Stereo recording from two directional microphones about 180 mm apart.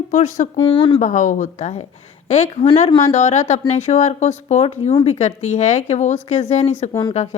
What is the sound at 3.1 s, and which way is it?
A woman's voice, 40° left (ahead or behind).